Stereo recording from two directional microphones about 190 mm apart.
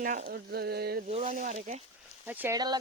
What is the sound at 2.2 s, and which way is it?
Speech, 10° right (ahead or behind).